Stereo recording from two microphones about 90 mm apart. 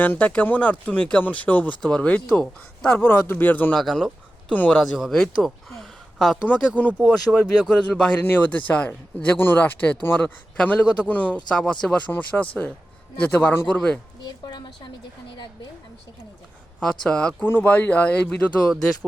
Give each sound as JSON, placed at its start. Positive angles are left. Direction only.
{"t": 0.0, "sound": "speech", "side_deg": 20}
{"t": 3.8, "sound": "a sound", "side_deg": 5}
{"t": 4.5, "sound": "speech", "side_deg": 20}
{"t": 4.8, "sound": "speech", "side_deg": 0}
{"t": 13.7, "sound": "speech", "side_deg": 10}
{"t": 14.3, "sound": "a woman's voice", "side_deg": 50}
{"t": 16.8, "sound": "speech", "side_deg": 10}
{"t": 17.4, "sound": "speech", "side_deg": 20}